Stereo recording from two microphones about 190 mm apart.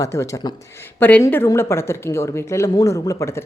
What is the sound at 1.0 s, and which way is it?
Speech, 10° left (ahead or behind).